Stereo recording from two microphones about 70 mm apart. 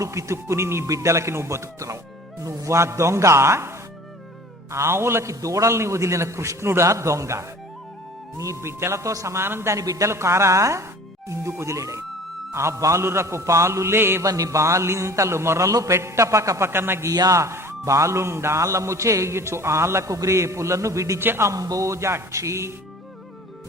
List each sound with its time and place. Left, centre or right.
0.0 s a man's voice: right
5.3 s a man's voice: right
9.7 s a man's voice: right
14.2 s a man's voice: right
17.2 s a man's voice: right
21.2 s a man's voice: right
21.5 s a man's voice: right